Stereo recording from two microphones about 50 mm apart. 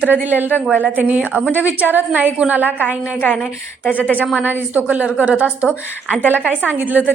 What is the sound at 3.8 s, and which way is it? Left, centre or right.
Speech, left.